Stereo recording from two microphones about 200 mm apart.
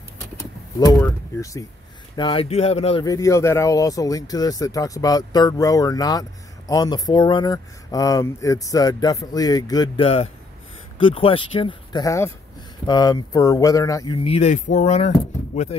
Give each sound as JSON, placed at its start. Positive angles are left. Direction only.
{"t": 0.4, "sound": "power windows", "side_deg": 20}
{"t": 2.1, "sound": "speech", "side_deg": 25}